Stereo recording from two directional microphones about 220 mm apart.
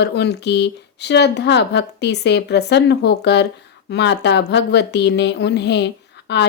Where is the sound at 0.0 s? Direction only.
50° left (ahead or behind).